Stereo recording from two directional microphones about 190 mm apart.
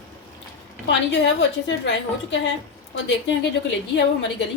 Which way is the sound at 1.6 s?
70° left (ahead or behind).